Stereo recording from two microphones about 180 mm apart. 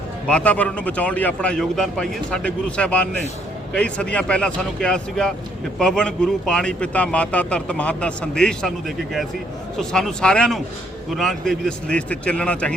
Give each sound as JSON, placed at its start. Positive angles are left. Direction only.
{"t": 0.3, "sound": "a man's voice", "side_deg": 5}
{"t": 9.7, "sound": "speech", "side_deg": 5}